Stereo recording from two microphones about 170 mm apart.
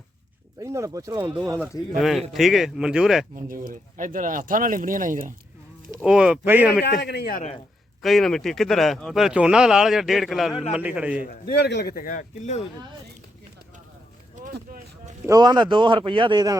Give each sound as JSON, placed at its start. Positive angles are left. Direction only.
{"t": 0.6, "sound": "speech", "side_deg": -15}
{"t": 2.0, "sound": "speech", "side_deg": 0}
{"t": 3.3, "sound": "speech", "side_deg": -50}
{"t": 6.0, "sound": "speech", "side_deg": -5}
{"t": 6.8, "sound": "a man's voice", "side_deg": 75}
{"t": 8.0, "sound": "speech", "side_deg": 0}
{"t": 11.3, "sound": "speech", "side_deg": 70}
{"t": 15.3, "sound": "a man's voice", "side_deg": -25}